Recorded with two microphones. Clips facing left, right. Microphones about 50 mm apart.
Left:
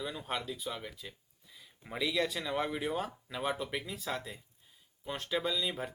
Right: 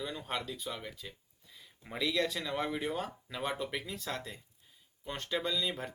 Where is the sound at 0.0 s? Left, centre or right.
Centre.